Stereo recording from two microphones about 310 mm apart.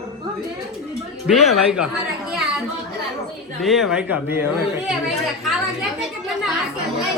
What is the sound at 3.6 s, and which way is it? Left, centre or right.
A man's voice, centre.